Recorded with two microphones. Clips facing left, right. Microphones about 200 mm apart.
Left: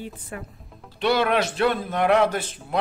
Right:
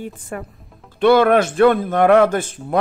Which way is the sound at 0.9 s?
50° right (ahead or behind).